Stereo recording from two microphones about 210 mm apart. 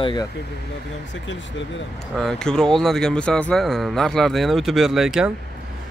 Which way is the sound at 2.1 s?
Centre (ahead or behind).